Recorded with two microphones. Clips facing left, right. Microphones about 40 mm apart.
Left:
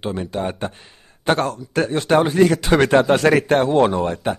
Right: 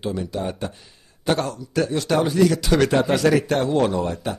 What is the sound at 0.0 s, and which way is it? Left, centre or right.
Speech, left.